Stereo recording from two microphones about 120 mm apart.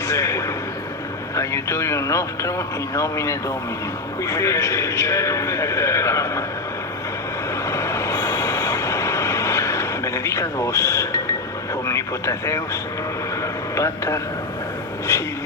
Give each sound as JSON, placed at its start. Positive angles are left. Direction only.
{"t": 0.1, "sound": "a sound", "side_deg": 25}
{"t": 1.4, "sound": "a man's voice", "side_deg": 25}
{"t": 7.7, "sound": "train", "side_deg": 25}
{"t": 11.9, "sound": "a man's voice", "side_deg": 25}
{"t": 13.4, "sound": "a sound", "side_deg": 25}
{"t": 15.1, "sound": "a man's voice", "side_deg": 25}